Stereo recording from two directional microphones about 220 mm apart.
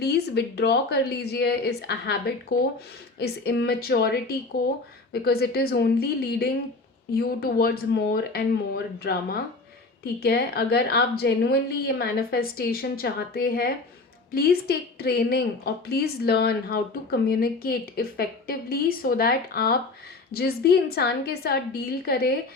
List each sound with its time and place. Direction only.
0.0 s a woman's voice: 45° left (ahead or behind)